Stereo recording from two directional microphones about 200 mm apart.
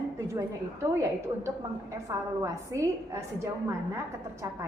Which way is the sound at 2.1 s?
15° right (ahead or behind).